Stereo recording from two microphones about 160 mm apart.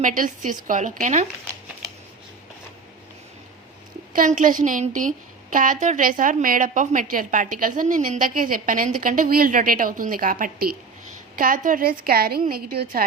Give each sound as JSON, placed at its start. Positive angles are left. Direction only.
{"t": 0.0, "sound": "a woman's voice", "side_deg": -55}
{"t": 4.1, "sound": "a woman's voice", "side_deg": -55}